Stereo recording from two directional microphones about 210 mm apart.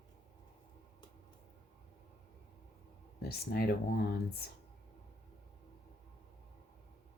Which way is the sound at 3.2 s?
50° left (ahead or behind).